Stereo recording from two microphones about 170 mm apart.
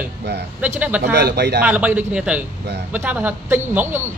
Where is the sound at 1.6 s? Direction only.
10° right (ahead or behind).